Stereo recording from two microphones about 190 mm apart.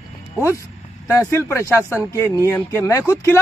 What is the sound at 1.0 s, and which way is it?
Speech, 15° left (ahead or behind).